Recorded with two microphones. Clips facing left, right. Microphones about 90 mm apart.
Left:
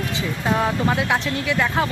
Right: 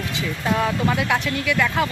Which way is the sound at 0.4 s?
25° left (ahead or behind).